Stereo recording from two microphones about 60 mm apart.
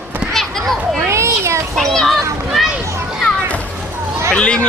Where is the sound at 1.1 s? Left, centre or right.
Right.